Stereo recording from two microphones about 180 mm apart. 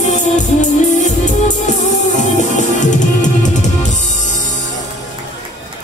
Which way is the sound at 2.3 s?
45° left (ahead or behind).